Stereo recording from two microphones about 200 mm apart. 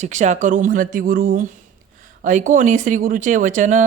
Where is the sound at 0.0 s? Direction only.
35° right (ahead or behind).